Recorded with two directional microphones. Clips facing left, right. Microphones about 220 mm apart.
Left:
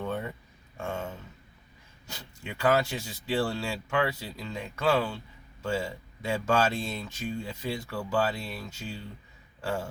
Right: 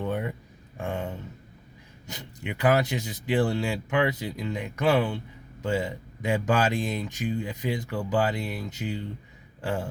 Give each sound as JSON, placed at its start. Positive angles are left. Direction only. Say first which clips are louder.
{"t": 0.0, "sound": "speech", "louder": "right 4 dB", "side_deg": -15}